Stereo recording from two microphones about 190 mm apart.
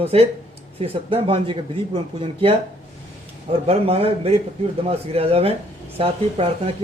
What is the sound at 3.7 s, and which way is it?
A man's voice, 30° right (ahead or behind).